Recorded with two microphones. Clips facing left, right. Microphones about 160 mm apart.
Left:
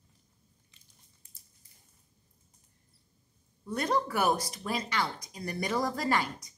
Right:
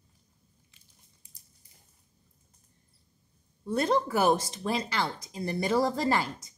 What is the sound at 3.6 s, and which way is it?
Speech, 30° right (ahead or behind).